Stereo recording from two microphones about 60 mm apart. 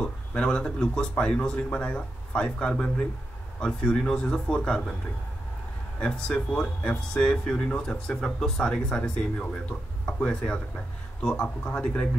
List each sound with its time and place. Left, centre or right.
0.0 s speech: centre
5.9 s speech: centre